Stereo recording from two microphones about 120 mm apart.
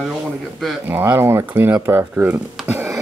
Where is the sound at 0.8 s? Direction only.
15° right (ahead or behind).